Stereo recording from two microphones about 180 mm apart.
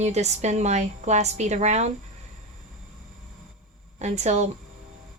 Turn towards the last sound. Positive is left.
turn(degrees=-40)  # may be behind; listen again after turning